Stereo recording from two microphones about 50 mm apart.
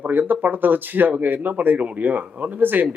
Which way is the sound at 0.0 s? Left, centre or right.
Right.